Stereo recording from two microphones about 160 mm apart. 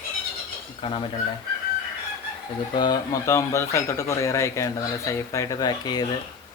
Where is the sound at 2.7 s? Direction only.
25° left (ahead or behind).